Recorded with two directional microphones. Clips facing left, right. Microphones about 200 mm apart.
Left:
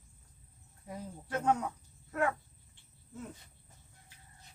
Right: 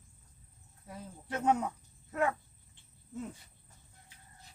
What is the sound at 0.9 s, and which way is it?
Speech, 15° left (ahead or behind).